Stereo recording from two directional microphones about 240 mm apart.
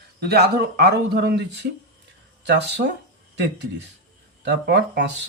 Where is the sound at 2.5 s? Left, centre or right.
Right.